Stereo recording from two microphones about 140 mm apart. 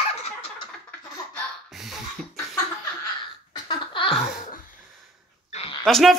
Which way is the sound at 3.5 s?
35° left (ahead or behind).